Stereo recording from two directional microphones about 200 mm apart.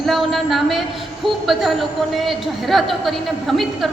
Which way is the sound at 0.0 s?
Centre (ahead or behind).